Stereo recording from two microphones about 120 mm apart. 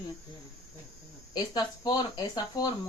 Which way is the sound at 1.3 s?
35° left (ahead or behind).